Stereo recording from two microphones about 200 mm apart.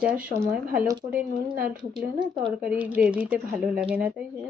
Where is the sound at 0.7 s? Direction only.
5° right (ahead or behind).